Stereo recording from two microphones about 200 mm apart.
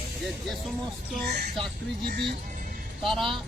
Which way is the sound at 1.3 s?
50° right (ahead or behind).